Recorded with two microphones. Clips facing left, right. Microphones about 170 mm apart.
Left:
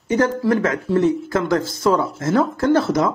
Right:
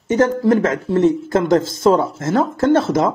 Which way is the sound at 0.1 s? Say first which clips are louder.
Right 3 dB; 25° right (ahead or behind).